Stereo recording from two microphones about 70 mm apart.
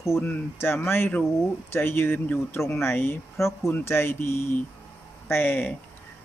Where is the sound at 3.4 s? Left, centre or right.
Left.